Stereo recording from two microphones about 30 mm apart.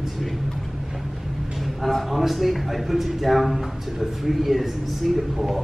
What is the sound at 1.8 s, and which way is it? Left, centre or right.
A man's voice, centre.